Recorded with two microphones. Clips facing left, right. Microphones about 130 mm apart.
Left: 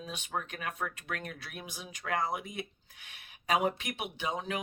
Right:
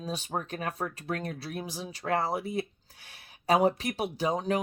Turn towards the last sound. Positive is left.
turn(degrees=-40)  # may be behind; listen again after turning